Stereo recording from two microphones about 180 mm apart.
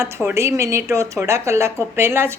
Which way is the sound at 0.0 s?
15° right (ahead or behind).